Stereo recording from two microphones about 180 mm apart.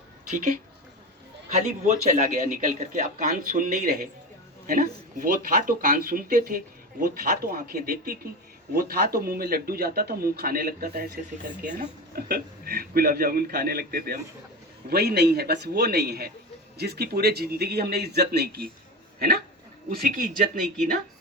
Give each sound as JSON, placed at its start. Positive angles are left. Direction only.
{"t": 1.5, "sound": "speech", "side_deg": -40}
{"t": 19.9, "sound": "speech", "side_deg": -55}